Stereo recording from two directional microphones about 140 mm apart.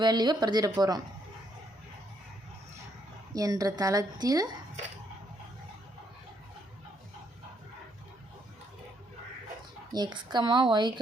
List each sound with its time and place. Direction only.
0.0 s a woman's voice: 30° right (ahead or behind)
3.3 s a woman's voice: 25° right (ahead or behind)
9.9 s a woman's voice: 30° right (ahead or behind)